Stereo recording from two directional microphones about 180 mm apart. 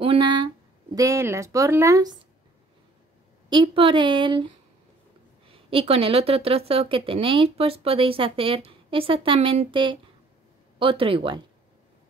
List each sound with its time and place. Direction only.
0.0 s speech: 30° right (ahead or behind)
3.4 s a woman's voice: 25° right (ahead or behind)
5.5 s a woman's voice: 30° right (ahead or behind)